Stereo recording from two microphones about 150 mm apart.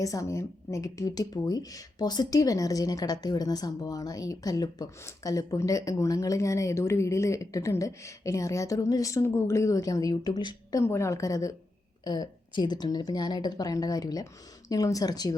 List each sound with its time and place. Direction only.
0.0 s speech: 20° left (ahead or behind)